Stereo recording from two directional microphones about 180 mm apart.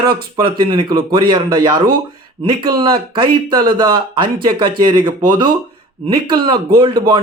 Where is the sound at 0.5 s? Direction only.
25° right (ahead or behind).